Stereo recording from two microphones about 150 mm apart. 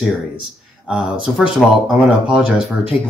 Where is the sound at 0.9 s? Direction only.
5° right (ahead or behind).